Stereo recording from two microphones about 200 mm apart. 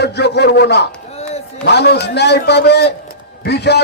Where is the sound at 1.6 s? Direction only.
55° left (ahead or behind).